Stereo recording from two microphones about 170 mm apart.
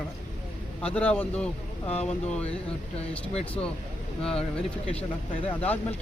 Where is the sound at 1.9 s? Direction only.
40° left (ahead or behind).